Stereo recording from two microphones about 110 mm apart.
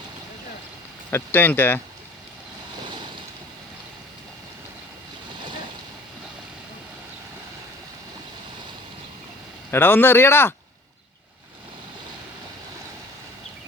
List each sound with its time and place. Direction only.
1.1 s speech: 20° left (ahead or behind)
9.7 s speech: 20° left (ahead or behind)